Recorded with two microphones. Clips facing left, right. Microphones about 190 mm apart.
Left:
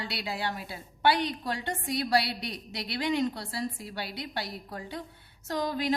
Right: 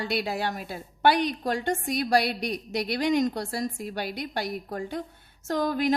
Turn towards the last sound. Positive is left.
turn(degrees=-50)  # may be behind; listen again after turning